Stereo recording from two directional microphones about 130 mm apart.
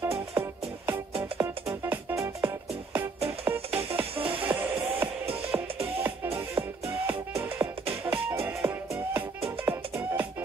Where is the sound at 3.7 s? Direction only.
50° right (ahead or behind).